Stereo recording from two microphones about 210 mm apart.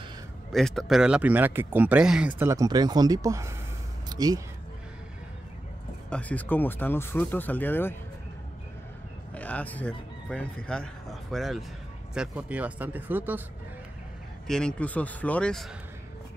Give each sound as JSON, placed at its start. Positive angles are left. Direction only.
{"t": 0.5, "sound": "speech", "side_deg": 0}
{"t": 4.1, "sound": "music", "side_deg": -20}
{"t": 6.0, "sound": "speech", "side_deg": 5}
{"t": 9.3, "sound": "speech", "side_deg": 5}
{"t": 14.5, "sound": "speech", "side_deg": 5}